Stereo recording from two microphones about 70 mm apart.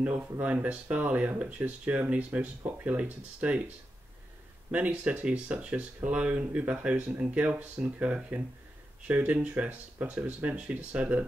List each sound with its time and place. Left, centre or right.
0.0 s speech: right